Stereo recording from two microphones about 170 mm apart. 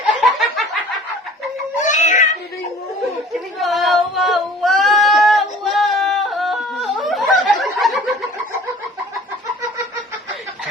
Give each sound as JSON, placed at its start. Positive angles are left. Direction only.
{"t": 0.2, "sound": "snicker", "side_deg": 0}
{"t": 1.8, "sound": "music", "side_deg": 45}
{"t": 3.6, "sound": "singing", "side_deg": 0}